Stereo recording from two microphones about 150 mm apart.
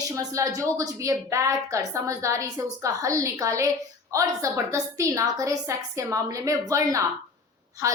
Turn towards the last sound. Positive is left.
turn(degrees=-20)  # may be behind; listen again after turning